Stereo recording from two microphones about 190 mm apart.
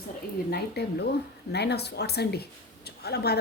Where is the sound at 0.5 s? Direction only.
60° left (ahead or behind).